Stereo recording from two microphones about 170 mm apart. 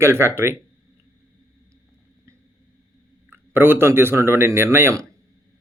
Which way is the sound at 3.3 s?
15° right (ahead or behind).